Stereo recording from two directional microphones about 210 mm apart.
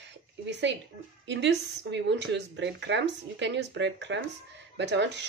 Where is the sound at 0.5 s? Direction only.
55° right (ahead or behind).